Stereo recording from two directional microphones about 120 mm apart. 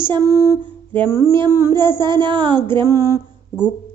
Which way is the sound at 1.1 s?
30° right (ahead or behind).